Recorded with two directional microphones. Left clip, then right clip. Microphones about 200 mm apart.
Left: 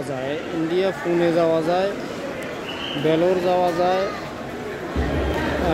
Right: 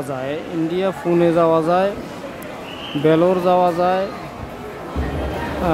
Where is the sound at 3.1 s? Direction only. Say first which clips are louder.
Right 4 dB; 35° right (ahead or behind).